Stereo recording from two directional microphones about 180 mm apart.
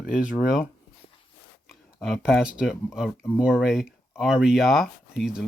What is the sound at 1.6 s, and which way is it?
Speech, centre (ahead or behind).